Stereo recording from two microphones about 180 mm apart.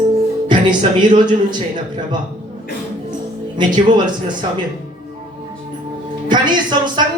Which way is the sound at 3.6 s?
25° right (ahead or behind).